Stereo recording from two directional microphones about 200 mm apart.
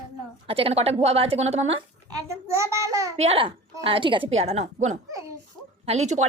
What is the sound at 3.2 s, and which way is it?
A woman's voice, 30° right (ahead or behind).